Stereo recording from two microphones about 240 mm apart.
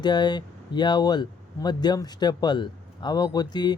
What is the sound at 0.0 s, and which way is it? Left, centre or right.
Speech, centre.